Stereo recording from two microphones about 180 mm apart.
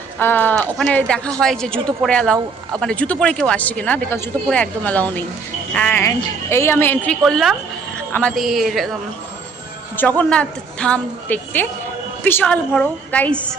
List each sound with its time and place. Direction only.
0.2 s a woman's voice: 10° left (ahead or behind)
10.2 s a woman's voice: 5° left (ahead or behind)